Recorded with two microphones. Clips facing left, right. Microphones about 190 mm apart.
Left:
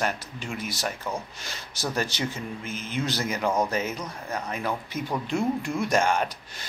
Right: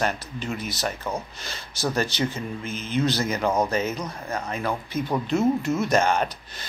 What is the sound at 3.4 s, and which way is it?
Speech, 15° right (ahead or behind).